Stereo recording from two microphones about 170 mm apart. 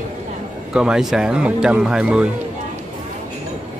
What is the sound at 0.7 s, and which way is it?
Speech, 5° right (ahead or behind).